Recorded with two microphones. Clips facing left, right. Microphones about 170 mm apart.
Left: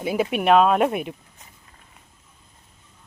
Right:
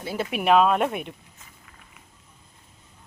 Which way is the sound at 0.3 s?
Centre (ahead or behind).